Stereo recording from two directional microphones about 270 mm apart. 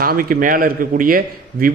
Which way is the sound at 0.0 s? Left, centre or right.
Right.